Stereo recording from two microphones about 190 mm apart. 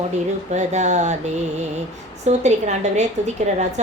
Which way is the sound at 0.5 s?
35° right (ahead or behind).